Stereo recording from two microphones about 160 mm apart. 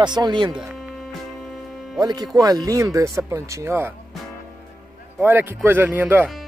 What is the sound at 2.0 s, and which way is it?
Speech, 25° right (ahead or behind).